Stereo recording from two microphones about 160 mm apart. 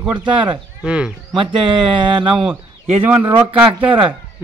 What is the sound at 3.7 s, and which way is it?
Speech, 35° right (ahead or behind).